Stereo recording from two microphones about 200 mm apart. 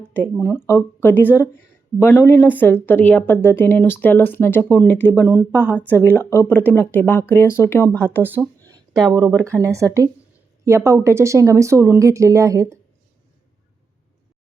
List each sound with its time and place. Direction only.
0.4 s speech: 10° left (ahead or behind)
5.3 s speech: 10° right (ahead or behind)
6.1 s speech: 10° left (ahead or behind)
8.2 s a sound: 10° right (ahead or behind)
9.0 s speech: 20° right (ahead or behind)